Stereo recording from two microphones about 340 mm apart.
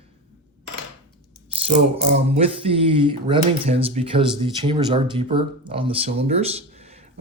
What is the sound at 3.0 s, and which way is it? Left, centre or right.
Speech, centre.